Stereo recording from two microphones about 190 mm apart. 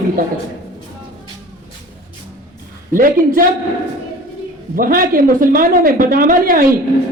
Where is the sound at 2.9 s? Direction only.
45° right (ahead or behind).